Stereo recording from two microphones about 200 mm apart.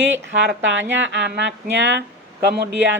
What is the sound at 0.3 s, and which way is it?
Speech, 65° right (ahead or behind).